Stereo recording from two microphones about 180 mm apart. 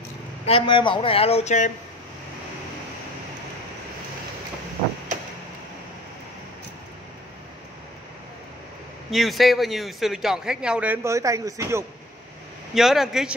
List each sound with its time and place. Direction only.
0.5 s speech: 30° left (ahead or behind)
9.1 s a man's voice: centre (ahead or behind); by 11.8 s 15° right (ahead or behind)
12.7 s a man's voice: centre (ahead or behind)